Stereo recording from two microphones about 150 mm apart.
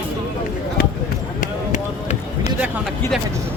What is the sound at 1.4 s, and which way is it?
Speech, 55° left (ahead or behind).